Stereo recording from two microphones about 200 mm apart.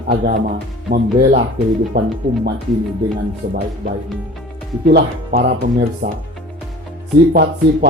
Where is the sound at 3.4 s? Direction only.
50° right (ahead or behind).